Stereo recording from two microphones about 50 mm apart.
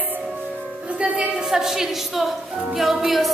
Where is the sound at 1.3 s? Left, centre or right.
Centre.